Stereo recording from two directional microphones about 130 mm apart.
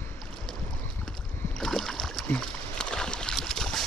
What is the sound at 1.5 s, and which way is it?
Rowboat, 5° left (ahead or behind).